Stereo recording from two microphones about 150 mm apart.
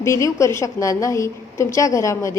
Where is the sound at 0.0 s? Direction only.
20° left (ahead or behind).